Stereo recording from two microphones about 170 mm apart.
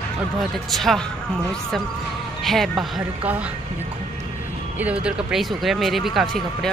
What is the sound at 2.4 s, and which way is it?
Speech, centre (ahead or behind).